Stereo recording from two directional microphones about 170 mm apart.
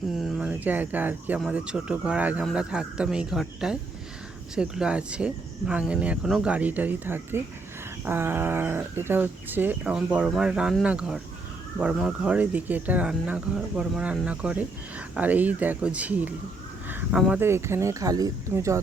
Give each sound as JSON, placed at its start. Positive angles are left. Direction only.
{"t": 0.2, "sound": "speech", "side_deg": 0}
{"t": 16.9, "sound": "a sound", "side_deg": -5}
{"t": 17.4, "sound": "speech", "side_deg": -15}